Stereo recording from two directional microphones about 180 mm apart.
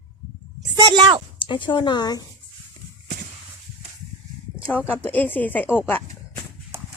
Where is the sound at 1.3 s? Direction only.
30° left (ahead or behind).